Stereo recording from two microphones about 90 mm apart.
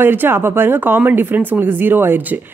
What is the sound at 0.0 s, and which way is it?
A woman's voice, 25° right (ahead or behind).